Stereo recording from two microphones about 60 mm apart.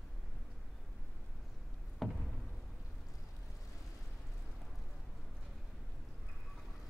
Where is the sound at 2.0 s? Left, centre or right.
Centre.